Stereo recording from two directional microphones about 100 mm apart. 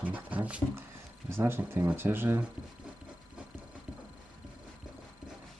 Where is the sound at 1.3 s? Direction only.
25° right (ahead or behind).